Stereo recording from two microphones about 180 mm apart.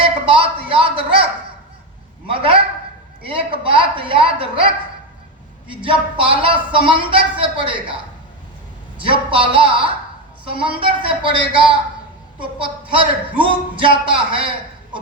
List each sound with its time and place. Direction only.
0.0 s a sound: 30° right (ahead or behind)
2.2 s speech: 30° right (ahead or behind)
9.0 s speech: 30° right (ahead or behind)